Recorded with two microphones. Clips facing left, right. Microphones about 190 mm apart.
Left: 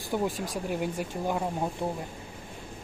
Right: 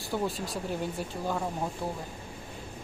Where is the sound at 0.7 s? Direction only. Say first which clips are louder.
Left 4 dB; 15° left (ahead or behind).